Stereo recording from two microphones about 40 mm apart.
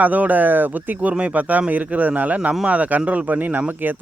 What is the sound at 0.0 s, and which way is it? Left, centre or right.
Speech, right.